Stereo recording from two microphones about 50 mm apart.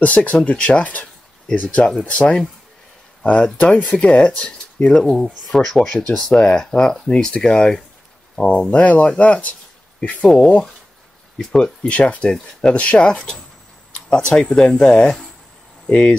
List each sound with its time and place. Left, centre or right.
0.0 s speech: left
3.2 s speech: centre
5.1 s speech: centre; by 9.6 s left
9.9 s speech: centre
11.9 s speech: left